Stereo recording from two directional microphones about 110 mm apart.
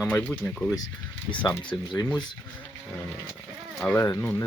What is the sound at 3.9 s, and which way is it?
Speech, 25° left (ahead or behind).